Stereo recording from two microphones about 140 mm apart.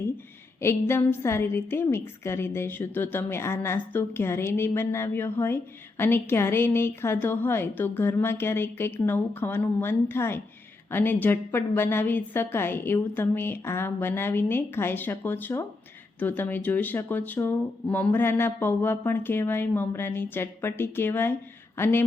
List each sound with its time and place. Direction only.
0.6 s speech: 15° left (ahead or behind)